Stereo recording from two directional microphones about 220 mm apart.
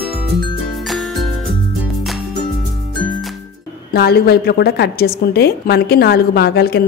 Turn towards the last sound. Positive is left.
turn(degrees=45)  # may be behind; listen again after turning